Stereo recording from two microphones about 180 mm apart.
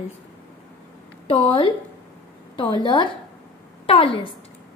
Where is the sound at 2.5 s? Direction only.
25° left (ahead or behind).